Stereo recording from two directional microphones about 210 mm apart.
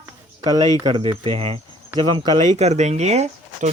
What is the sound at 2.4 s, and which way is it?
Speech, 35° right (ahead or behind).